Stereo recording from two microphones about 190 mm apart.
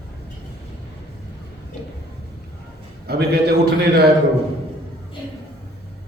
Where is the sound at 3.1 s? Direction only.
55° right (ahead or behind).